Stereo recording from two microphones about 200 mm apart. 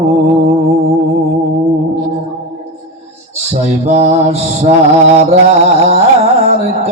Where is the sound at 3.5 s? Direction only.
35° right (ahead or behind).